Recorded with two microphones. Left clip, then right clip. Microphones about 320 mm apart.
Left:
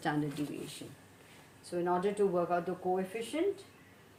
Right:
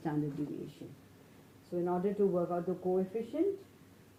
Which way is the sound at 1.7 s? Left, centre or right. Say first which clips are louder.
Left 2 dB; left.